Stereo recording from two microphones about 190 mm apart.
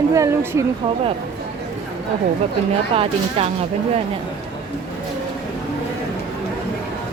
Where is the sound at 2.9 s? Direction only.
30° right (ahead or behind).